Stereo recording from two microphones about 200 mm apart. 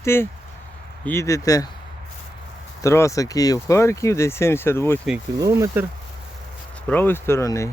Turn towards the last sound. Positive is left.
turn(degrees=15)  # may be behind; listen again after turning